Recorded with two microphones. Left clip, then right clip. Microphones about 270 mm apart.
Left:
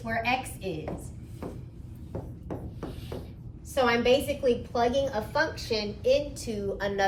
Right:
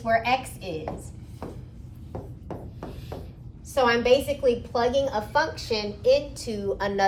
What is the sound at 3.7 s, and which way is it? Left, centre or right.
A woman's voice, centre.